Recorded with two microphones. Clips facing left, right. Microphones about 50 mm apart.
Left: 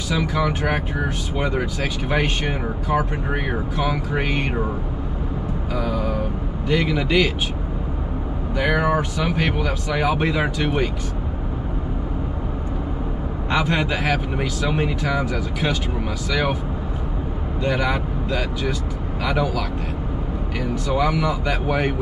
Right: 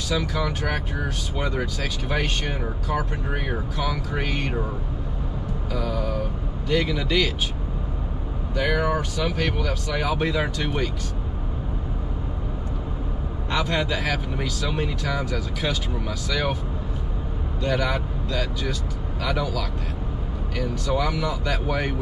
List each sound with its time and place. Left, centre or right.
0.1 s speech: centre
5.7 s vehicle: centre
6.7 s speech: left
8.5 s speech: left
13.5 s speech: centre
17.6 s speech: left